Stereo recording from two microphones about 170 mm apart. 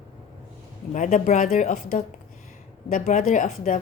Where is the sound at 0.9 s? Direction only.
50° left (ahead or behind).